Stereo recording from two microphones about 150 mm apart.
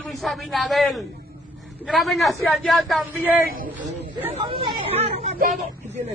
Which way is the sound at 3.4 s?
70° right (ahead or behind).